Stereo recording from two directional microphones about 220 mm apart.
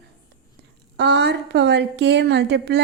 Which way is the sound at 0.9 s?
50° right (ahead or behind).